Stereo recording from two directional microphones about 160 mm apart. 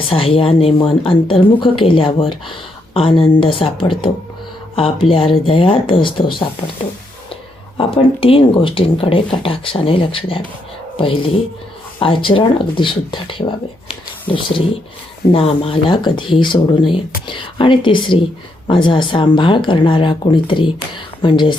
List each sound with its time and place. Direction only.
0.1 s speech: 35° left (ahead or behind)
7.8 s speech: 35° left (ahead or behind)
15.3 s speech: 35° left (ahead or behind)